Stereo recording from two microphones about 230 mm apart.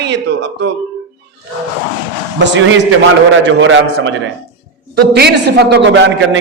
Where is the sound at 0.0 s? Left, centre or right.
Right.